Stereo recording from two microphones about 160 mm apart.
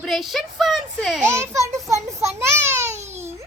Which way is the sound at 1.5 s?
20° right (ahead or behind).